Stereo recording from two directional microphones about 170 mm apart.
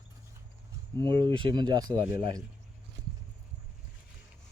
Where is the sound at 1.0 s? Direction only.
25° right (ahead or behind).